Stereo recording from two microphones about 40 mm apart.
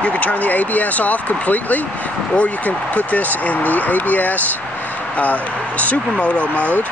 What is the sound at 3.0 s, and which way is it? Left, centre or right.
Speech, left.